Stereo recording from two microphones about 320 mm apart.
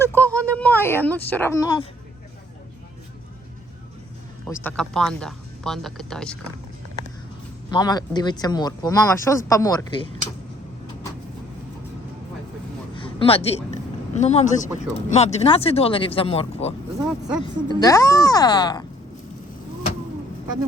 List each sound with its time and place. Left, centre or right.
0.1 s a woman's voice: centre
4.4 s speech: centre
7.7 s speech: centre
12.9 s a sound: centre
14.1 s speech: left
17.0 s speech: centre
17.4 s speech: centre